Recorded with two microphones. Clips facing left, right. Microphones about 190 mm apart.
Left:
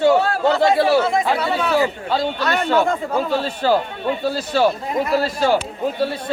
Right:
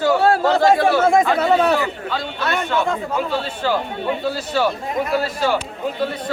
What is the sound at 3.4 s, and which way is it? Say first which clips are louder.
Speech: left 3 dB; 40° left (ahead or behind).